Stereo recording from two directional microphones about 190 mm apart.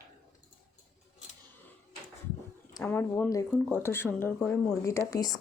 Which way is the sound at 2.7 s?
10° left (ahead or behind).